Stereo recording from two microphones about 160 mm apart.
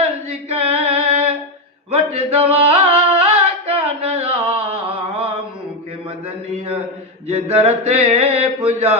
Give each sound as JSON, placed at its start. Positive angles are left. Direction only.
{"t": 0.5, "sound": "music", "side_deg": -40}
{"t": 1.9, "sound": "a sound", "side_deg": -40}
{"t": 7.3, "sound": "mantra", "side_deg": -40}